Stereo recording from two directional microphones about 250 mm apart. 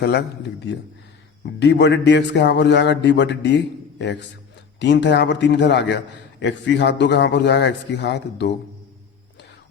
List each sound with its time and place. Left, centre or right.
0.0 s a man's voice: left